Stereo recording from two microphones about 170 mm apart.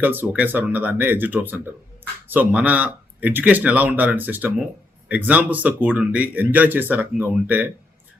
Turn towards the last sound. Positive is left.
turn(degrees=-10)  # may be behind; listen again after turning